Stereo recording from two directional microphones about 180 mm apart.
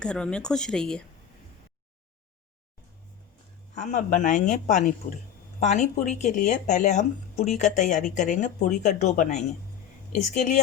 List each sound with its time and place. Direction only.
0.0 s speech: 5° left (ahead or behind)
3.8 s speech: 45° left (ahead or behind)